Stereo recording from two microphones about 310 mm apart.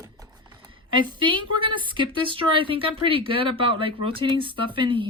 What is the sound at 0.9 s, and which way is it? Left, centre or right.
A woman's voice, centre.